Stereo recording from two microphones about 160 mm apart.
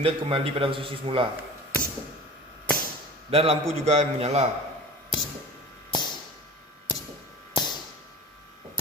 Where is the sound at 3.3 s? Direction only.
40° right (ahead or behind).